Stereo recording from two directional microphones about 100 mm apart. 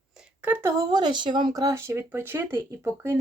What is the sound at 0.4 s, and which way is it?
Speech, 25° right (ahead or behind).